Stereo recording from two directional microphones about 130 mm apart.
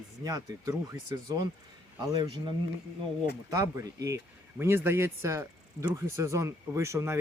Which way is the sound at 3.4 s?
25° right (ahead or behind).